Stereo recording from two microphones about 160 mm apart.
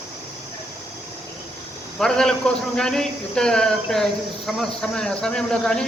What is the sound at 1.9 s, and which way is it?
A man's voice, 5° left (ahead or behind).